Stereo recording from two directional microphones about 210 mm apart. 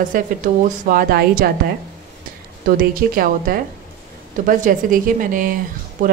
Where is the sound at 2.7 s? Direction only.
45° right (ahead or behind).